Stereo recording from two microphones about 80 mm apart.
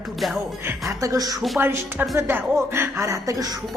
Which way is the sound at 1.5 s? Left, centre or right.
Right.